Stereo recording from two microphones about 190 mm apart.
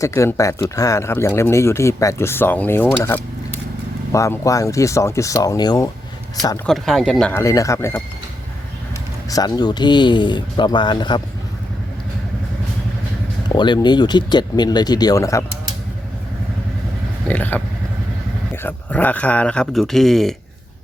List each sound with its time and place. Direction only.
0.0 s speech: 15° left (ahead or behind)
6.7 s speech: centre (ahead or behind)
9.3 s speech: 20° left (ahead or behind)
13.5 s speech: 25° left (ahead or behind)
17.2 s speech: 10° left (ahead or behind)